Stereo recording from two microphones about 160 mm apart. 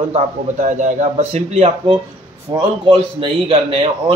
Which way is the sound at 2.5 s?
30° right (ahead or behind).